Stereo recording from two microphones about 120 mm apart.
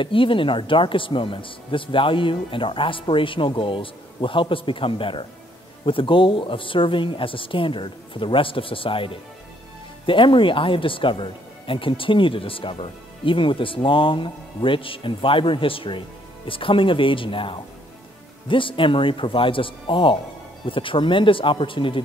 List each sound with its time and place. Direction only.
0.0 s speech: 45° left (ahead or behind)